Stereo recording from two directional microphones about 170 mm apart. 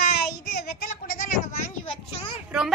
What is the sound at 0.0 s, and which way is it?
Child singing, 65° left (ahead or behind).